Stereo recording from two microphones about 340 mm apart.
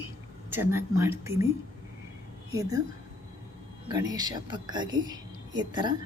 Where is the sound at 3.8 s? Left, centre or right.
Centre.